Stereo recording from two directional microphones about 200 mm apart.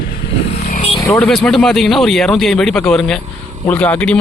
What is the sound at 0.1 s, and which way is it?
Vehicle, 50° left (ahead or behind).